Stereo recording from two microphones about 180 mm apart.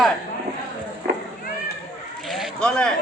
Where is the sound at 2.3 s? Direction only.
Centre (ahead or behind).